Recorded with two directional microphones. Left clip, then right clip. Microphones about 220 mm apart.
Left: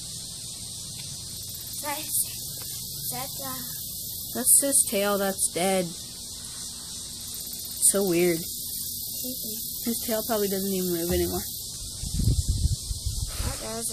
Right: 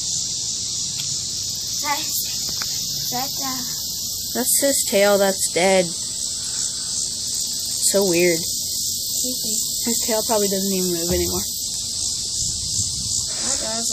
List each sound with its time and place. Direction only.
4.4 s speech: centre (ahead or behind)
7.9 s speech: 15° left (ahead or behind)
10.0 s speech: 15° left (ahead or behind)